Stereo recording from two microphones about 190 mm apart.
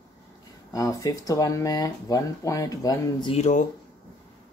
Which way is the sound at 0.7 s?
20° left (ahead or behind).